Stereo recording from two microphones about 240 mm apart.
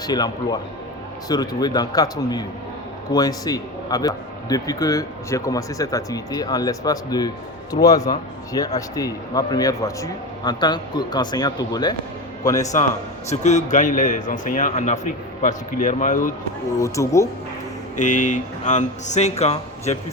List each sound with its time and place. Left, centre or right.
0.0 s a man's voice: centre
13.3 s a man's voice: left
16.8 s a man's voice: centre
17.9 s a man's voice: left